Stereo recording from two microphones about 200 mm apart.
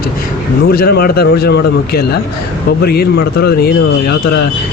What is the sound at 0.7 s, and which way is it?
Speech, 50° left (ahead or behind).